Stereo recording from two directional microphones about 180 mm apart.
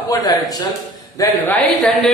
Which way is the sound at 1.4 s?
10° left (ahead or behind).